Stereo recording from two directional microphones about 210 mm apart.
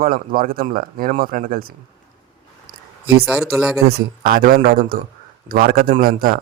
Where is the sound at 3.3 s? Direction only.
Centre (ahead or behind).